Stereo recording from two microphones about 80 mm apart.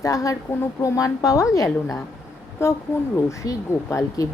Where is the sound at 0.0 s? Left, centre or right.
Left.